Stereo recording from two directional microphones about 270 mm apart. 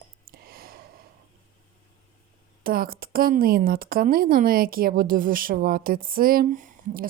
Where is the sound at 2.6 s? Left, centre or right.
Right.